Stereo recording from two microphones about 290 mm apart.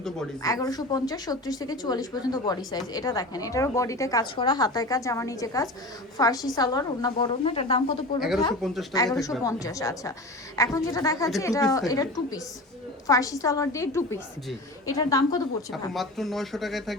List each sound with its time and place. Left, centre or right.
0.4 s speech: centre
8.6 s speech: centre
9.4 s speech: centre
15.9 s speech: centre